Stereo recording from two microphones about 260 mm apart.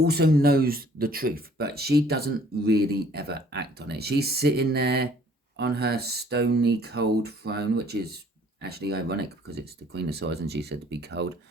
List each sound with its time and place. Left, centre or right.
0.0 s speech: right